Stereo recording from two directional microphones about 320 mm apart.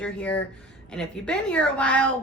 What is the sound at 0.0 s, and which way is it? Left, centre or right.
A woman's voice, centre.